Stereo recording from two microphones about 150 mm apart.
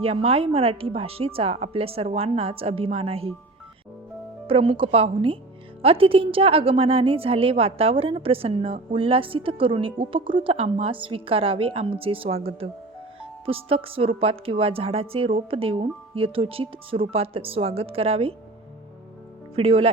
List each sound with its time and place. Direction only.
0.0 s a woman's voice: 40° right (ahead or behind)
4.4 s a woman's voice: 40° right (ahead or behind)
19.5 s a woman's voice: 40° right (ahead or behind)